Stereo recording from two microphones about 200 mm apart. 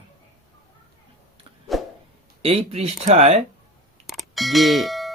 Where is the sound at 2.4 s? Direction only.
30° right (ahead or behind).